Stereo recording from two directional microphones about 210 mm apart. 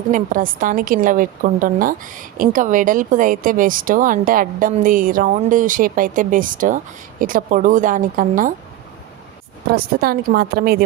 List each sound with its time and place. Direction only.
0.1 s a woman's voice: 40° right (ahead or behind)
9.6 s a woman's voice: 45° right (ahead or behind)